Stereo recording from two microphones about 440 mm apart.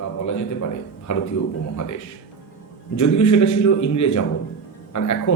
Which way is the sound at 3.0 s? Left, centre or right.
Left.